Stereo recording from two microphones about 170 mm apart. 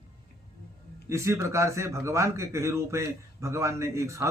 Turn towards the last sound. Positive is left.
turn(degrees=-15)  # may be behind; listen again after turning